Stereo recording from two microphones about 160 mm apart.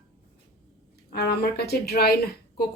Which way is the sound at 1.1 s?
85° left.